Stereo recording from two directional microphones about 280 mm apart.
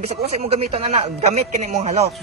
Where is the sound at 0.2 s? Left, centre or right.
Right.